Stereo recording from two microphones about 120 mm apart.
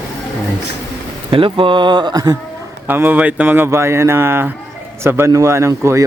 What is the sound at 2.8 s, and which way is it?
Speech, 15° right (ahead or behind).